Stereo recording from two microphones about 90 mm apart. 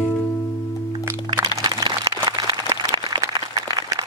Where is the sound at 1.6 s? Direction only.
50° right (ahead or behind).